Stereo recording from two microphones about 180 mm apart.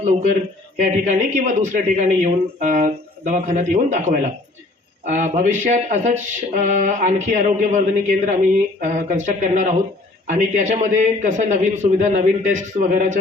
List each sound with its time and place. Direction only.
0.0 s a man's voice: 40° right (ahead or behind)